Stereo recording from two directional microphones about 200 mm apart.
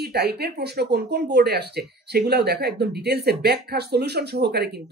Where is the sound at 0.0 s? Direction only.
55° right (ahead or behind).